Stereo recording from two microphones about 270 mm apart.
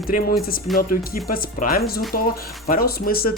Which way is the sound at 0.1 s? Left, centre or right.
Left.